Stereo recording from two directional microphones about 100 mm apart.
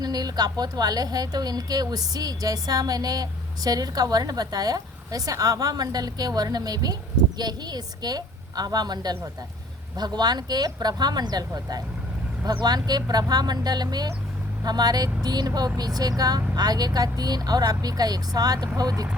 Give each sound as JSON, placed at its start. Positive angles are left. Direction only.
{"t": 0.0, "sound": "a woman's voice", "side_deg": -40}